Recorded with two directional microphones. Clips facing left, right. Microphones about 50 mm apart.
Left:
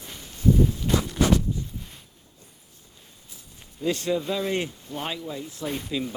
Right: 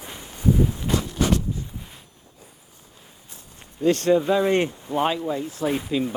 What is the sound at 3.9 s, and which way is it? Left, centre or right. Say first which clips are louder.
Speech: right 7 dB; right.